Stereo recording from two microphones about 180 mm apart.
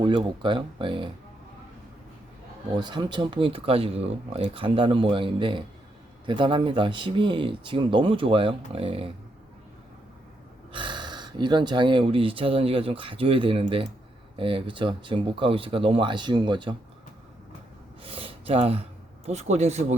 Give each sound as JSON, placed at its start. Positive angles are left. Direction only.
{"t": 0.0, "sound": "speech", "side_deg": -25}
{"t": 2.7, "sound": "speech", "side_deg": -25}
{"t": 10.7, "sound": "speech", "side_deg": -25}
{"t": 18.0, "sound": "gasp", "side_deg": -30}
{"t": 19.2, "sound": "speech", "side_deg": -40}